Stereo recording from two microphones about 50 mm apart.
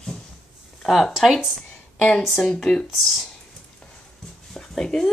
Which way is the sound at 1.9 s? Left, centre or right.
Centre.